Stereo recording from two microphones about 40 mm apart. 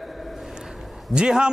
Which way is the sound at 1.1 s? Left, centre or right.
Right.